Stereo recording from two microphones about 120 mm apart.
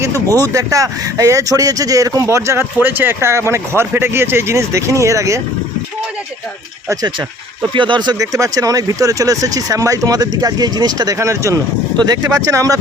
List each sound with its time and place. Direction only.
0.5 s speech: 30° right (ahead or behind)
6.8 s speech: 30° right (ahead or behind)
7.7 s speech: 40° right (ahead or behind)